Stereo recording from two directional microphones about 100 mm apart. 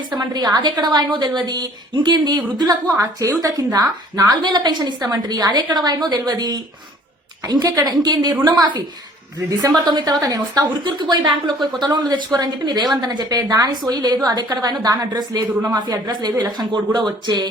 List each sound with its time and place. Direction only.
0.2 s a woman's voice: 45° right (ahead or behind)
9.5 s a woman's voice: 35° right (ahead or behind)